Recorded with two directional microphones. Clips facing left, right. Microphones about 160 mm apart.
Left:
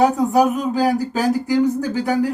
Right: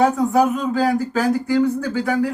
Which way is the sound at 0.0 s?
15° left (ahead or behind).